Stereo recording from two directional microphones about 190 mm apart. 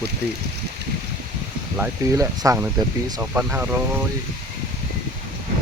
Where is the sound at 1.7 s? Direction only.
10° right (ahead or behind).